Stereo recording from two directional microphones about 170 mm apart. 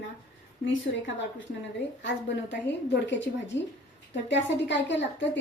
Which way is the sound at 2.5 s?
90° left.